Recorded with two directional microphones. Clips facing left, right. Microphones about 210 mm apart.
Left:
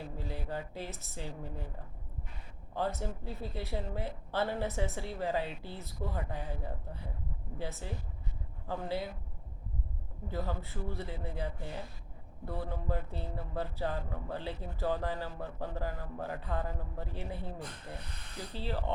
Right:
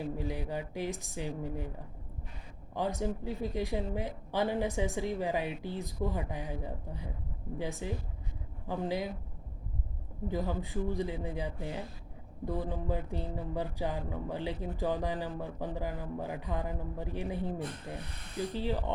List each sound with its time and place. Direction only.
0.2 s speech: 15° right (ahead or behind)
2.7 s speech: 15° right (ahead or behind)
10.2 s speech: 15° right (ahead or behind)